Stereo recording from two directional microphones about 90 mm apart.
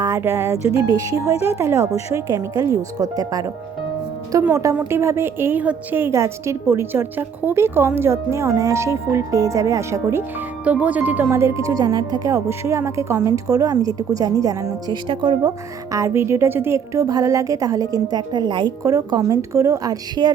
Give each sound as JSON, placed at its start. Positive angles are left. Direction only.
{"t": 0.2, "sound": "speech", "side_deg": -30}
{"t": 4.9, "sound": "a woman's voice", "side_deg": -30}
{"t": 10.6, "sound": "speech", "side_deg": -15}
{"t": 11.3, "sound": "speech", "side_deg": -30}
{"t": 12.5, "sound": "speech", "side_deg": -30}
{"t": 15.0, "sound": "speech", "side_deg": -65}
{"t": 15.9, "sound": "speech", "side_deg": -35}
{"t": 18.2, "sound": "speech", "side_deg": -55}
{"t": 18.8, "sound": "speech", "side_deg": -40}